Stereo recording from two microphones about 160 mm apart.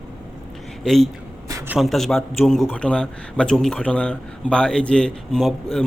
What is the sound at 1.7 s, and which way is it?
A man's voice, centre (ahead or behind).